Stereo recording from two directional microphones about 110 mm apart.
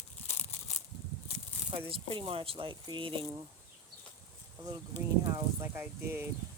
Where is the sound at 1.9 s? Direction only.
55° right (ahead or behind).